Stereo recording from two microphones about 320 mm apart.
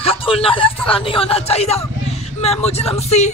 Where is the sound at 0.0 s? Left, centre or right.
Centre.